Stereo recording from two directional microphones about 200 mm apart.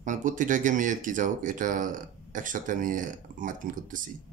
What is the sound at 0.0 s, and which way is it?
Speech, 40° right (ahead or behind).